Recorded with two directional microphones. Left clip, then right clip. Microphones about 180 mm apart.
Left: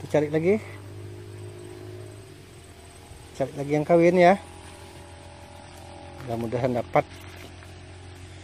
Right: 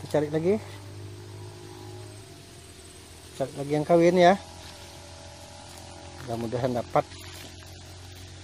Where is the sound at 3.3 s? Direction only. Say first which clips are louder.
Left 2 dB; 10° left (ahead or behind).